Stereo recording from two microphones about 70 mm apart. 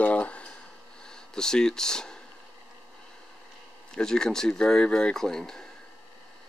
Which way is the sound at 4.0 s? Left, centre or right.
Centre.